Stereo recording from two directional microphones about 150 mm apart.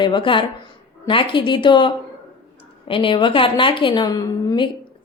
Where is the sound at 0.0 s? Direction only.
30° left (ahead or behind).